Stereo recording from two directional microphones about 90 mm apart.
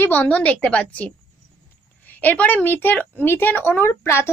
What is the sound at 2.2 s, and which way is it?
A woman's voice, 15° left (ahead or behind).